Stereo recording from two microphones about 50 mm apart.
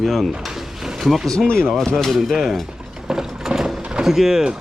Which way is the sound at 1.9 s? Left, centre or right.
Centre.